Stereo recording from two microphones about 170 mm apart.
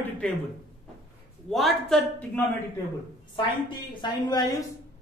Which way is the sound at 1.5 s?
Centre (ahead or behind).